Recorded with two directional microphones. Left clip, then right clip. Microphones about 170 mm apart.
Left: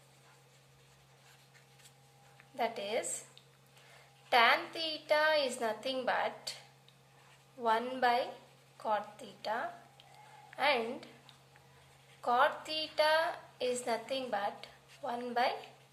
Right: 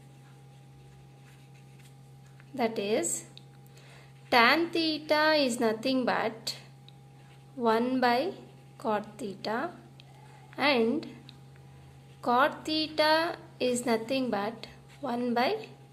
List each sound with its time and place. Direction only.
2.6 s a woman's voice: 20° right (ahead or behind)
7.6 s a woman's voice: 25° right (ahead or behind)